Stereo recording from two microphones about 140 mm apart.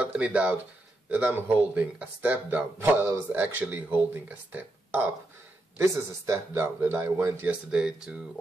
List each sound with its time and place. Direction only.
0.0 s speech: 10° right (ahead or behind)